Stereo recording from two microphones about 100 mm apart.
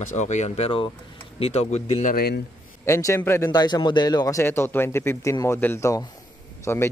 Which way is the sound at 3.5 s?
45° left (ahead or behind).